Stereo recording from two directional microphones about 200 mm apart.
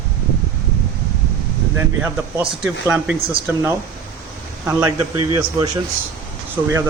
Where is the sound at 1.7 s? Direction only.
10° right (ahead or behind).